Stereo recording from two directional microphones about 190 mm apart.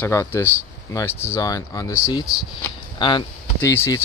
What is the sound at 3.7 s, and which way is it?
Speech, 15° left (ahead or behind).